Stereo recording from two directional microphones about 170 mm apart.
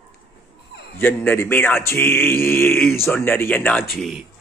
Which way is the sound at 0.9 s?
10° left (ahead or behind).